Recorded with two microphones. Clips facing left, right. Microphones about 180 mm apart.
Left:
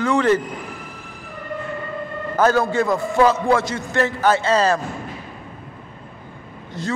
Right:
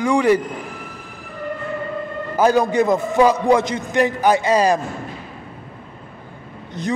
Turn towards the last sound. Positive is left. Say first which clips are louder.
# right 2 dB
turn(degrees=-20)  # may be behind; listen again after turning